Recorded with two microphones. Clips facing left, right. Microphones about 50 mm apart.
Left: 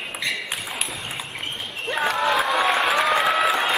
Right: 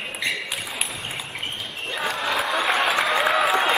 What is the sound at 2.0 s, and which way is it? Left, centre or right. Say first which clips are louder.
Crowd: left 4 dB; left.